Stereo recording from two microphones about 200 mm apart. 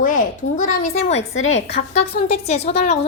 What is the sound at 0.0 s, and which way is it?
A woman's voice, 40° left (ahead or behind).